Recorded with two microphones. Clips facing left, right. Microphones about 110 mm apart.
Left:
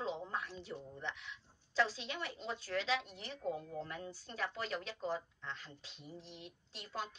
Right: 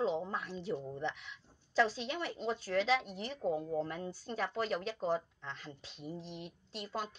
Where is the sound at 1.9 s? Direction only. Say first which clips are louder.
Right 5 dB; 55° right (ahead or behind).